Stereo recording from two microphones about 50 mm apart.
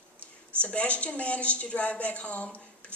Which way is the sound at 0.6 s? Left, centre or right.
Left.